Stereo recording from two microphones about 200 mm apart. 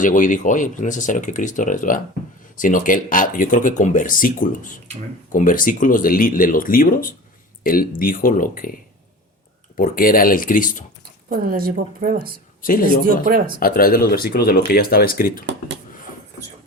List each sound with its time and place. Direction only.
0.0 s speech: 40° left (ahead or behind)
9.7 s speech: 45° left (ahead or behind)
11.3 s a woman's voice: 45° right (ahead or behind)
12.6 s speech: 45° left (ahead or behind)